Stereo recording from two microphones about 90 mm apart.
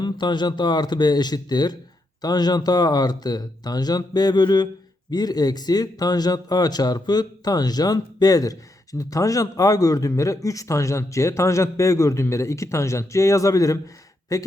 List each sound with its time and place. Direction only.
0.0 s speech: 55° left (ahead or behind); by 14.5 s 40° left (ahead or behind)